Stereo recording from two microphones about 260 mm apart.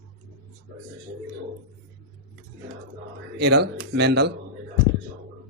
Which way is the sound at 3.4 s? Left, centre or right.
Right.